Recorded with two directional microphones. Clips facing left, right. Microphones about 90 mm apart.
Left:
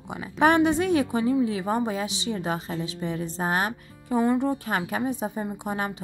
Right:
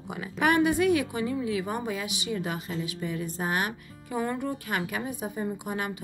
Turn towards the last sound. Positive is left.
turn(degrees=30)  # may be behind; listen again after turning